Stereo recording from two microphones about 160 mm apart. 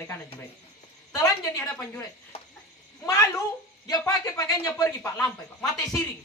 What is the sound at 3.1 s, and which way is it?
Speech, 20° left (ahead or behind).